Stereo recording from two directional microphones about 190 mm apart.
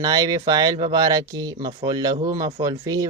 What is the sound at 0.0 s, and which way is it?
Speech, 20° right (ahead or behind).